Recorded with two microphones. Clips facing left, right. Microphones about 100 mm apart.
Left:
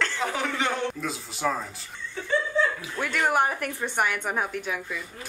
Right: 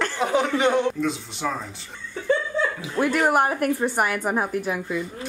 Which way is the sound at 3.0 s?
5° right (ahead or behind).